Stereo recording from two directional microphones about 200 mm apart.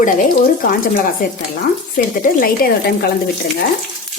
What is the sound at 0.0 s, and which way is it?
Speech, 40° left (ahead or behind).